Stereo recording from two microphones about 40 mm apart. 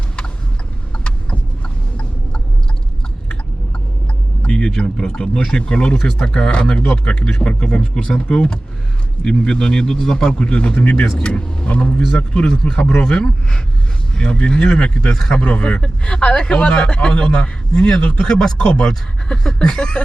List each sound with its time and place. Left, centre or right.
0.9 s a sound: left
4.4 s a man's voice: centre; by 7.2 s left
7.2 s a man's voice: centre
15.1 s speech: centre
15.4 s a man's voice: left